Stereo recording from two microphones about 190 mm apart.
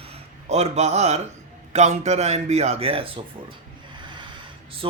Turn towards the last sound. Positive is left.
turn(degrees=-30)  # may be behind; listen again after turning